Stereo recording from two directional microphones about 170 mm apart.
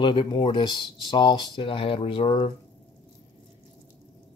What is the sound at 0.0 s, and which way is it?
Speech, 30° left (ahead or behind).